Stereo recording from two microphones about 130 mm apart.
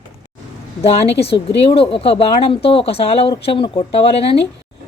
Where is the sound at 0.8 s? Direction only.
50° left (ahead or behind).